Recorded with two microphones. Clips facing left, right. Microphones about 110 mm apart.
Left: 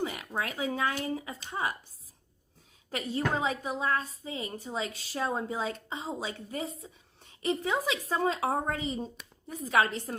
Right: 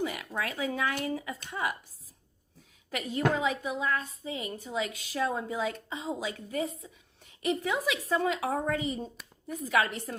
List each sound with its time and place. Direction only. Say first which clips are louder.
0.0 s a woman's voice: even; 25° left (ahead or behind)
2.9 s a woman's voice: right 2 dB; 30° left (ahead or behind)
9.1 s speech: right 3 dB; centre (ahead or behind)
9.6 s a woman's voice: left 1 dB; 30° left (ahead or behind)